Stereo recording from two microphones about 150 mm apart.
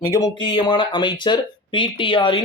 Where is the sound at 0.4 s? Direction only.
30° left (ahead or behind).